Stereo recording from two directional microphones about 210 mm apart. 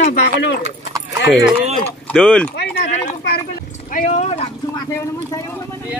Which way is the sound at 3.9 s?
35° left (ahead or behind).